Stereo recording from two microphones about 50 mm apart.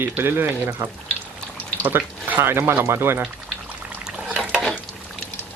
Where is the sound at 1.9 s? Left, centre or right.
Right.